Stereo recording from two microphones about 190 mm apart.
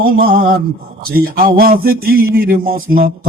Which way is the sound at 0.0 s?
50° right (ahead or behind).